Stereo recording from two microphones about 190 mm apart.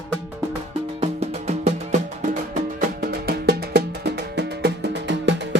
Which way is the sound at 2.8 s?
55° right (ahead or behind).